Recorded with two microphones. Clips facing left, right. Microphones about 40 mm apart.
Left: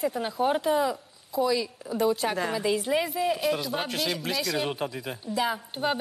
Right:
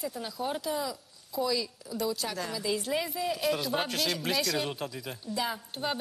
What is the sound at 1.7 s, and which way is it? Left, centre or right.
Speech, left.